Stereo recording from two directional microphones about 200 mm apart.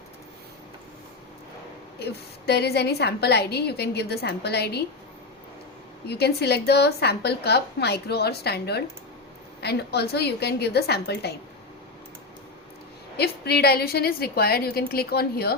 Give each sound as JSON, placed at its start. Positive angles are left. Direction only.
{"t": 2.0, "sound": "a woman's voice", "side_deg": 55}
{"t": 6.1, "sound": "a woman's voice", "side_deg": 55}
{"t": 13.1, "sound": "a woman's voice", "side_deg": 55}